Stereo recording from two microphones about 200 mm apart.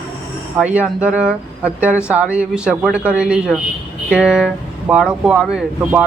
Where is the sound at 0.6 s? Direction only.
5° right (ahead or behind).